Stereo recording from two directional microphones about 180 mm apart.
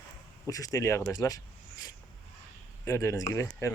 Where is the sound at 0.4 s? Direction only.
20° left (ahead or behind).